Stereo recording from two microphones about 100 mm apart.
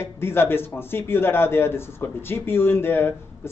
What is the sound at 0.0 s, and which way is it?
Speech, 25° left (ahead or behind).